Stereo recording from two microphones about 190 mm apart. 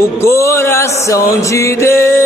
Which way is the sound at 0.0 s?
15° left (ahead or behind).